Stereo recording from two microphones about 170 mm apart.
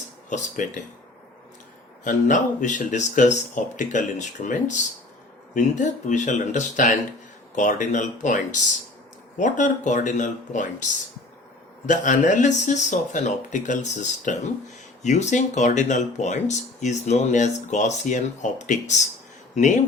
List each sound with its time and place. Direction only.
0.3 s speech: 45° left (ahead or behind)
2.0 s speech: 50° left (ahead or behind)
11.9 s speech: 45° left (ahead or behind)